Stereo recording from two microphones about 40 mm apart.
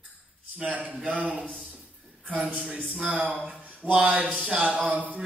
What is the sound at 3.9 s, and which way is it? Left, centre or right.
Speech, right.